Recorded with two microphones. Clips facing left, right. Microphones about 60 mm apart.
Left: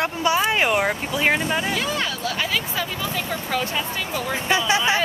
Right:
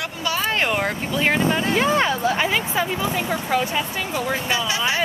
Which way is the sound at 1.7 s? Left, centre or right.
Right.